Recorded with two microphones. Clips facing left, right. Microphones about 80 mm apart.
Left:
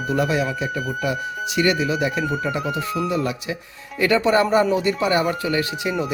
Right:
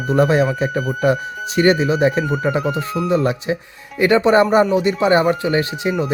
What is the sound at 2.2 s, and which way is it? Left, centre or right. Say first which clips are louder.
Speech: right 4 dB; centre.